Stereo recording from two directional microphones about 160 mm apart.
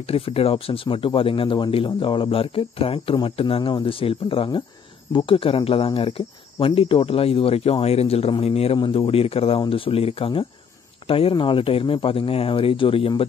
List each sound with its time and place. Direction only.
0.1 s speech: 35° left (ahead or behind)